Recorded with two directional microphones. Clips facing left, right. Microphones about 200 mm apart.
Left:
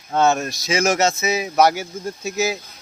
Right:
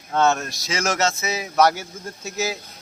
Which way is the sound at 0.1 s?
10° left (ahead or behind).